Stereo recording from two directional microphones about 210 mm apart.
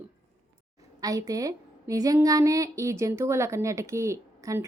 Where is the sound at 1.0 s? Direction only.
15° right (ahead or behind).